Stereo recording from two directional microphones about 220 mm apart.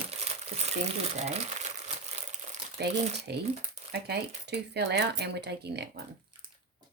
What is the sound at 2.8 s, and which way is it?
Speech, 45° right (ahead or behind).